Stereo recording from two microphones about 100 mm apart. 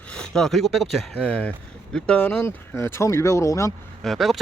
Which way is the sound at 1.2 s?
15° left (ahead or behind).